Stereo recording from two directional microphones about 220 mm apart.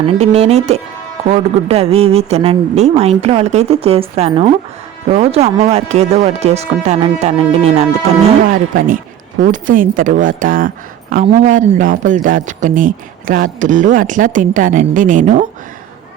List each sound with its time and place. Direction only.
0.0 s speech: 30° right (ahead or behind)